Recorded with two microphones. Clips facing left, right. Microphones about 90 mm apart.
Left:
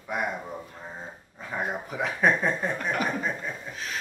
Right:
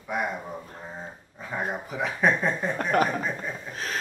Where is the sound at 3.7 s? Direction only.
45° right (ahead or behind).